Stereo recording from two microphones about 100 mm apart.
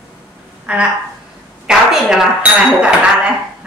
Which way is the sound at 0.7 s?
10° right (ahead or behind).